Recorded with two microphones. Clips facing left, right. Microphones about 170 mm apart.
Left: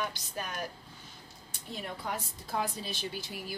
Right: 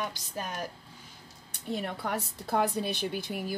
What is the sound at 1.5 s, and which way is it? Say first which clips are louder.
A woman's voice: right 7 dB; 65° right (ahead or behind).